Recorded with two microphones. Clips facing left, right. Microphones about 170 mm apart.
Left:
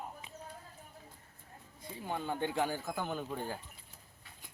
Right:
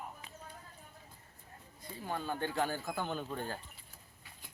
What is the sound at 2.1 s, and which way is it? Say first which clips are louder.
Speech: left 1 dB; 15° left (ahead or behind).